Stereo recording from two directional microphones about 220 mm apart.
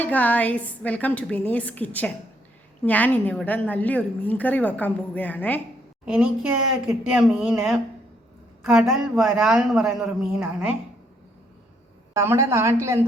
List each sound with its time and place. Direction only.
0.0 s a woman's voice: 5° left (ahead or behind)
6.1 s a woman's voice: 5° right (ahead or behind)
12.1 s a woman's voice: 10° right (ahead or behind)